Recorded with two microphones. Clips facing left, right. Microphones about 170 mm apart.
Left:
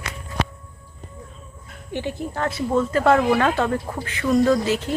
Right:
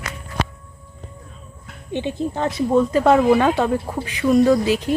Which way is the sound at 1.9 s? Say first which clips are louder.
Right 4 dB; 20° right (ahead or behind).